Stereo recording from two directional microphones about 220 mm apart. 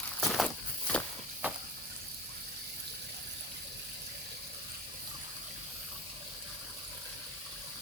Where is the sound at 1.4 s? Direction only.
5° right (ahead or behind).